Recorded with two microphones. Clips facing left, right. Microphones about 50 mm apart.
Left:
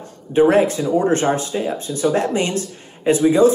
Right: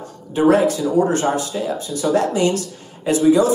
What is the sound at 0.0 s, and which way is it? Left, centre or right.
Speech, left.